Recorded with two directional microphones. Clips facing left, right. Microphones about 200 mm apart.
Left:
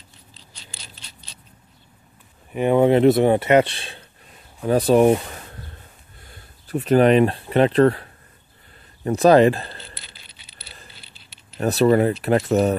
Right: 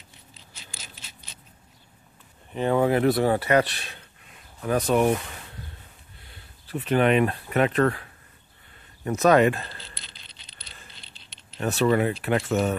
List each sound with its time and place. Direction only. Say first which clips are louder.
2.5 s speech: left 6 dB; 15° left (ahead or behind); by 9.8 s 30° left (ahead or behind)
9.8 s coin: left 4 dB; 5° left (ahead or behind)
10.9 s keys jangling: left 2 dB; 5° left (ahead or behind)
11.6 s speech: left 5 dB; 35° left (ahead or behind)